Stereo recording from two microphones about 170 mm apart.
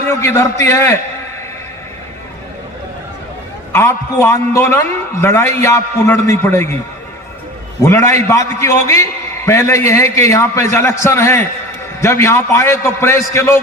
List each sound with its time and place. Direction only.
0.1 s a man's voice: 15° left (ahead or behind)
3.7 s a man's voice: 15° left (ahead or behind)
7.8 s a man's voice: 15° left (ahead or behind)